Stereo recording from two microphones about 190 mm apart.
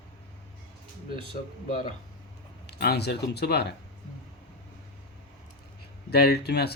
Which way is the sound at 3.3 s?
60° left (ahead or behind).